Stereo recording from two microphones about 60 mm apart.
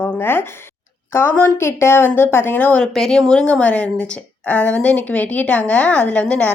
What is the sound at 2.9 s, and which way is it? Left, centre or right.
A woman's voice, centre.